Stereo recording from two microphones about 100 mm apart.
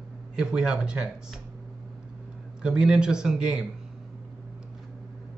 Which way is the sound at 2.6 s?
10° right (ahead or behind).